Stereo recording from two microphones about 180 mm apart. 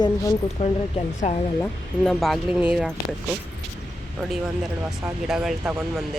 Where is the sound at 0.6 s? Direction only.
40° left (ahead or behind).